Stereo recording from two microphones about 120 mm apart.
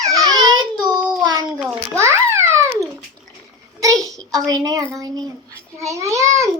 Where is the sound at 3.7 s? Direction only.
30° right (ahead or behind).